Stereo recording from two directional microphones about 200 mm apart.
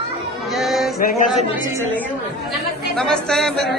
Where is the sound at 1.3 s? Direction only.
35° left (ahead or behind).